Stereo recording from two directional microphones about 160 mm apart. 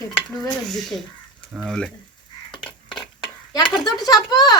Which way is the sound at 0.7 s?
Centre (ahead or behind).